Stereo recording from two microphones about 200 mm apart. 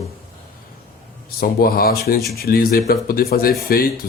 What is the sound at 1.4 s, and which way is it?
Speech, 45° left (ahead or behind).